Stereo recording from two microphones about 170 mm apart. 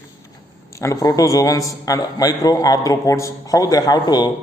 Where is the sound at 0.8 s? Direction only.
20° left (ahead or behind).